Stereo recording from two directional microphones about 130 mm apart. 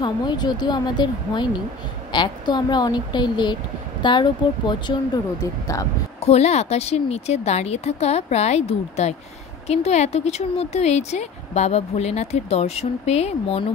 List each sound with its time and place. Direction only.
0.0 s speech: 35° left (ahead or behind)
6.2 s speech: 55° left (ahead or behind)